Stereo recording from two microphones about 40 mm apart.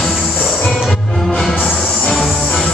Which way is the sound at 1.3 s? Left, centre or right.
Centre.